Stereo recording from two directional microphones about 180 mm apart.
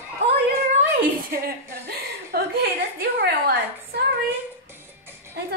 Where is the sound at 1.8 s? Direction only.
60° right (ahead or behind).